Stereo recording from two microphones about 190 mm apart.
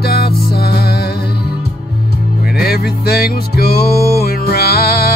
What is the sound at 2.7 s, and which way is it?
Music, 55° left (ahead or behind).